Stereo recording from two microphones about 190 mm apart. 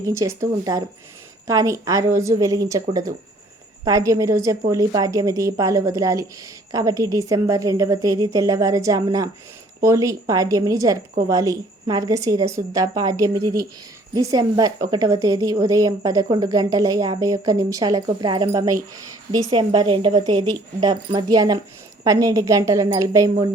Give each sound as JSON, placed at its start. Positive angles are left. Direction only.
{"t": 0.0, "sound": "a woman's voice", "side_deg": -15}
{"t": 3.8, "sound": "a woman's voice", "side_deg": -15}